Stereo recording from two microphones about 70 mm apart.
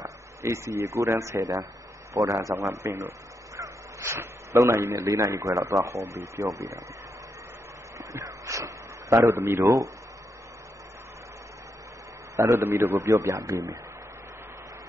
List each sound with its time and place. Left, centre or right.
0.0 s a man's voice: right
8.0 s a sound: right
9.3 s speech: right
12.4 s a man's voice: right